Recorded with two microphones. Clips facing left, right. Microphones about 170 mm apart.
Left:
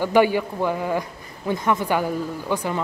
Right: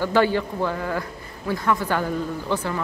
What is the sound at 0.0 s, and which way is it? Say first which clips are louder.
A man's voice: left 2 dB; 15° left (ahead or behind).